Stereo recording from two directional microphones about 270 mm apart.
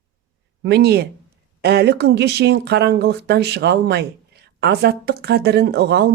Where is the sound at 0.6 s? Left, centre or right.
Right.